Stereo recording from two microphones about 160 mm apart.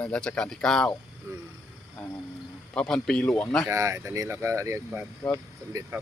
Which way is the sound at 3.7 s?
20° right (ahead or behind).